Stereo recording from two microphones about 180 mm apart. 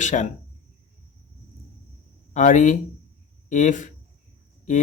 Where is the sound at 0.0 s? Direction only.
45° left (ahead or behind).